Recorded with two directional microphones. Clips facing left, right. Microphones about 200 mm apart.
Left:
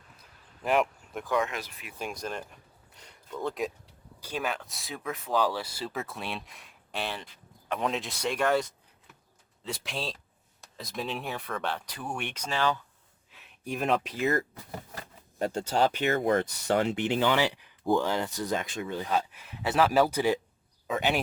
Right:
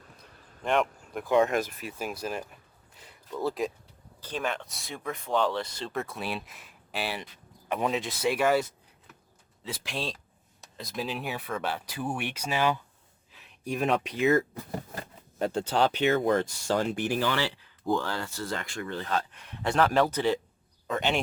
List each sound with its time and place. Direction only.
0.6 s a sound: 5° left (ahead or behind)
1.2 s speech: 25° right (ahead or behind)
1.5 s speech: 45° right (ahead or behind)
2.0 s a sound: 5° right (ahead or behind)
4.2 s speech: 5° left (ahead or behind); by 12.8 s 15° right (ahead or behind)
13.3 s speech: centre (ahead or behind)
15.7 s speech: 45° left (ahead or behind)
16.0 s speech: 60° left (ahead or behind)
16.8 s speech: 20° left (ahead or behind); by 21.2 s 5° left (ahead or behind)